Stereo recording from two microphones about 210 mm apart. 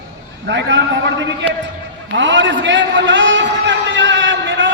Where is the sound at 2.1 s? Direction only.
60° right (ahead or behind).